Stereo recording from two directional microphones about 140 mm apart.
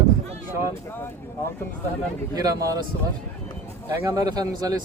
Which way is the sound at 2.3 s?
25° right (ahead or behind).